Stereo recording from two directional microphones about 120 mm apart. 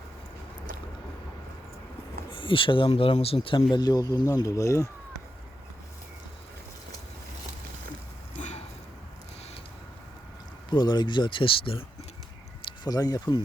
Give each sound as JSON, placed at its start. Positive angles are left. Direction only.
{"t": 2.3, "sound": "speech", "side_deg": 45}
{"t": 8.4, "sound": "a sound", "side_deg": 80}
{"t": 10.7, "sound": "speech", "side_deg": 35}
{"t": 12.8, "sound": "speech", "side_deg": 35}